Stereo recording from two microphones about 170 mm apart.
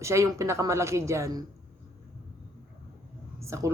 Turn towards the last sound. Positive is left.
turn(degrees=-15)  # may be behind; listen again after turning